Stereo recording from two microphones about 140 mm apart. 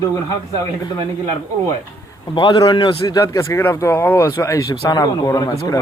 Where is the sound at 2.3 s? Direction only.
35° left (ahead or behind).